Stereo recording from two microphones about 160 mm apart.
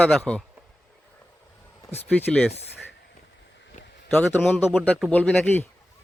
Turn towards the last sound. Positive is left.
turn(degrees=10)  # may be behind; listen again after turning